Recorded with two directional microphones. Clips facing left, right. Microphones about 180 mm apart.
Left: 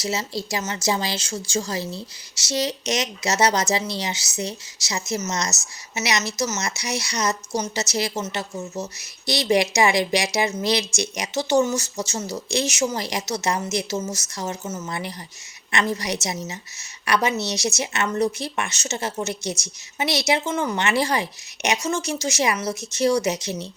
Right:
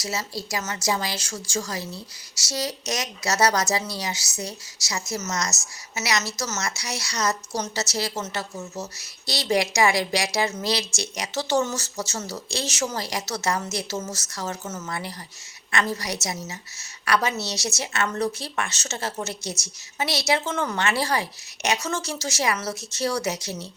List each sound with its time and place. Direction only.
0.0 s a woman's voice: 25° left (ahead or behind)